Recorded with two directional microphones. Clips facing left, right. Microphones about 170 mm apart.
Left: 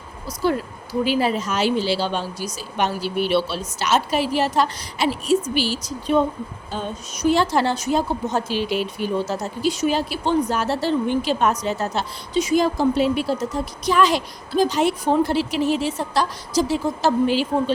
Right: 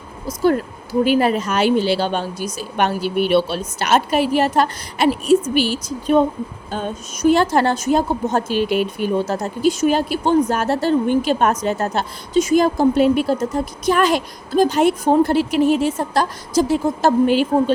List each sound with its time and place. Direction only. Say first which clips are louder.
0.3 s a woman's voice: right 5 dB; 50° right (ahead or behind)